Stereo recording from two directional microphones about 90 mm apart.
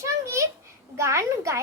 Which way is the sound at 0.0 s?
35° right (ahead or behind).